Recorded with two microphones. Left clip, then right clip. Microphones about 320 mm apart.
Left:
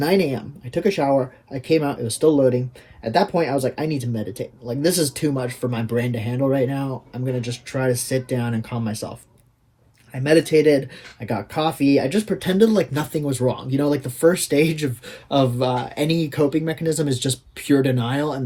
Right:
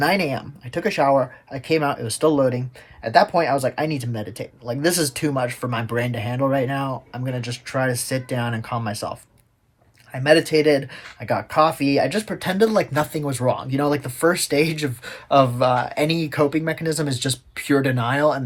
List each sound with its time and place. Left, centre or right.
0.0 s speech: centre